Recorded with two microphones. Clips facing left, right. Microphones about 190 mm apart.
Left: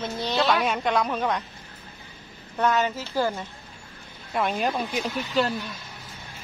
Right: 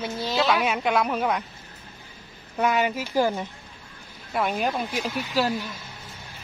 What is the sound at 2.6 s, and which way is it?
Speech, 10° right (ahead or behind).